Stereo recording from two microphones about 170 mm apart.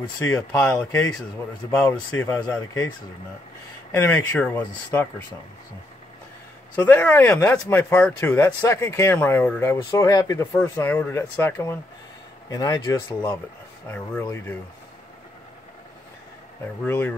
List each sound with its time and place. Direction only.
0.2 s speech: 15° left (ahead or behind)
3.9 s speech: 15° left (ahead or behind)
6.8 s speech: 10° left (ahead or behind)
16.8 s speech: 15° left (ahead or behind)